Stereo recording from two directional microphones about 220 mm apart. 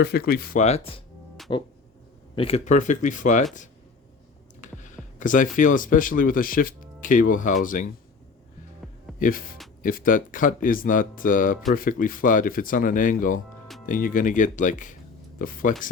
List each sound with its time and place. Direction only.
0.0 s speech: 45° left (ahead or behind)
4.6 s a sound: 35° left (ahead or behind)
5.5 s speech: 35° left (ahead or behind)
9.1 s speech: 40° left (ahead or behind)